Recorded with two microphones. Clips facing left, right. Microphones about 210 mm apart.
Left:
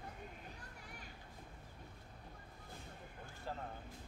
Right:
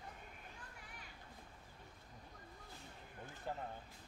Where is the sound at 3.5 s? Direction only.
15° right (ahead or behind).